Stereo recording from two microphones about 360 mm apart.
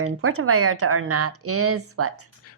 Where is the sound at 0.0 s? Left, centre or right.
Right.